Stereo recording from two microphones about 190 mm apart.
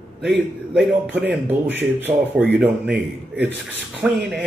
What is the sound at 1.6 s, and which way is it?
Speech, 10° right (ahead or behind).